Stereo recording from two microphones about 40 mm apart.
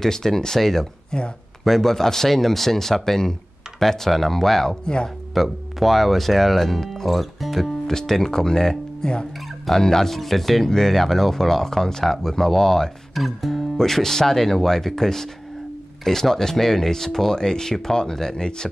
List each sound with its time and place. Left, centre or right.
0.0 s speech: centre
1.1 s speech: centre
1.6 s speech: centre
4.8 s speech: left
5.3 s speech: centre